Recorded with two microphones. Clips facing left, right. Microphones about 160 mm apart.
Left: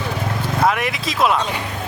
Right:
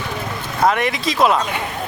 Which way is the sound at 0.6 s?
5° left (ahead or behind).